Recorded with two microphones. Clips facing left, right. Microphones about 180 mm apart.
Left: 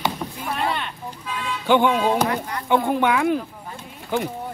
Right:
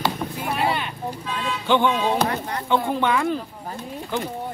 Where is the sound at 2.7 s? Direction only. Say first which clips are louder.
Left 2 dB; 15° left (ahead or behind).